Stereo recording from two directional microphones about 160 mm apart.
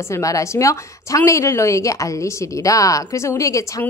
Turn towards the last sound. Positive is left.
turn(degrees=20)  # may be behind; listen again after turning